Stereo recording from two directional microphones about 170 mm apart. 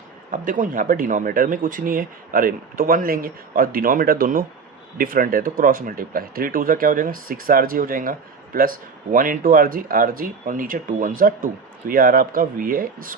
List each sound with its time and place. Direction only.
0.3 s speech: 50° right (ahead or behind)